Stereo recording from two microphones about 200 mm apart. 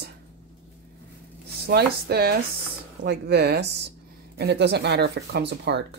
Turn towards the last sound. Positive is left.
turn(degrees=-60)  # may be behind; listen again after turning